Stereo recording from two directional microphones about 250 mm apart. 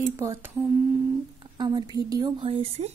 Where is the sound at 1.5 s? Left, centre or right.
Centre.